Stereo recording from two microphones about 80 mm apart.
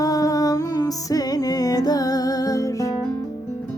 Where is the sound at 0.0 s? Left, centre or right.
Left.